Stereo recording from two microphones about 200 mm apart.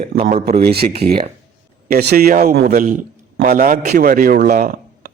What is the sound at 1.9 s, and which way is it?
A man's voice, 50° right (ahead or behind).